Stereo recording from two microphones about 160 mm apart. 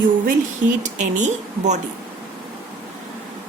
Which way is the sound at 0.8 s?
50° right (ahead or behind).